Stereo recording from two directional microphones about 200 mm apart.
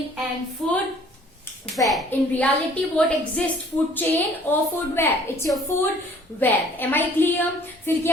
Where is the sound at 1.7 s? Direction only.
Centre (ahead or behind).